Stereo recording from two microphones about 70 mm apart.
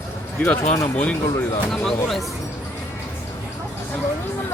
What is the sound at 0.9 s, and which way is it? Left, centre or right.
Speech, left.